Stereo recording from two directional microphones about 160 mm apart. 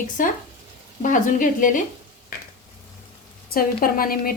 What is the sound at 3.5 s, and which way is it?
Speech, 65° left (ahead or behind).